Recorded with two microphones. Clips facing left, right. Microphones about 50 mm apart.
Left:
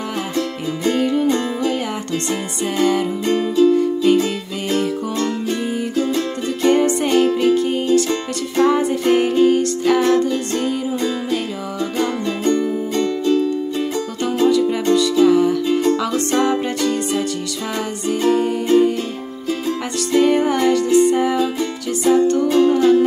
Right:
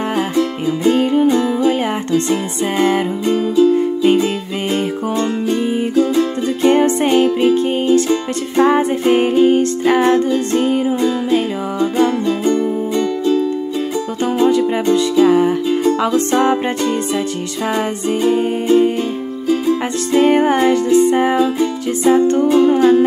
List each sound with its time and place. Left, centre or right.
0.4 s music: centre
3.3 s music: centre
3.7 s music: right
14.2 s music: right
15.6 s music: centre
16.0 s music: right
21.4 s music: right